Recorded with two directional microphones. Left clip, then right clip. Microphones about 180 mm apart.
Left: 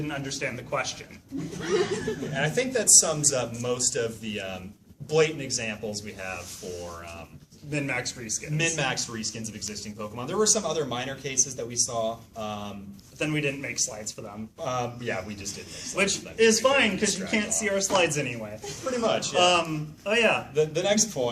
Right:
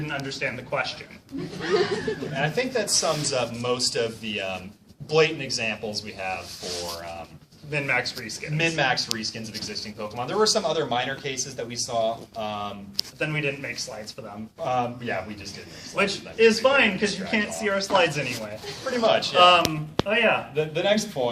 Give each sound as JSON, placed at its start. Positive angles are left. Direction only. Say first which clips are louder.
{"t": 0.1, "sound": "a man's voice", "louder": "right 6 dB", "side_deg": 0}
{"t": 2.3, "sound": "speech", "louder": "even", "side_deg": 15}
{"t": 7.7, "sound": "a man's voice", "louder": "right 5 dB", "side_deg": 0}
{"t": 8.5, "sound": "speech", "louder": "right 5 dB", "side_deg": 15}
{"t": 13.1, "sound": "a man's voice", "louder": "left 1 dB", "side_deg": 5}
{"t": 14.6, "sound": "speech", "louder": "right 4 dB", "side_deg": 15}
{"t": 16.0, "sound": "a man's voice", "louder": "right 2 dB", "side_deg": 0}
{"t": 19.0, "sound": "speech", "louder": "right 6 dB", "side_deg": 15}
{"t": 19.4, "sound": "a man's voice", "louder": "right 5 dB", "side_deg": 5}
{"t": 20.6, "sound": "speech", "louder": "right 1 dB", "side_deg": 15}